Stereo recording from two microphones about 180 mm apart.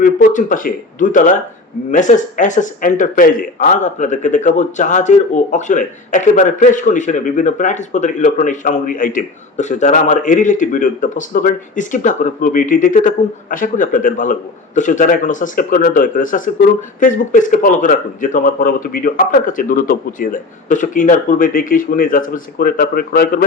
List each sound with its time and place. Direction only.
0.0 s speech: 50° left (ahead or behind)